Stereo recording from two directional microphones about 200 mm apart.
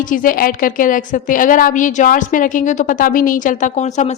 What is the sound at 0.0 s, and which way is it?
A woman's voice, 40° left (ahead or behind).